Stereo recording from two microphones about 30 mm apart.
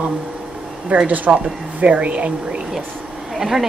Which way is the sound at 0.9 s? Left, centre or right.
Right.